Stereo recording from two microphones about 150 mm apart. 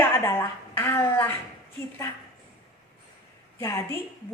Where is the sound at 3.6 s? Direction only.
20° left (ahead or behind).